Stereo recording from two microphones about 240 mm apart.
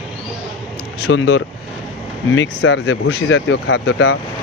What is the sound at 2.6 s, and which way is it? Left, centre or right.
Speech, left.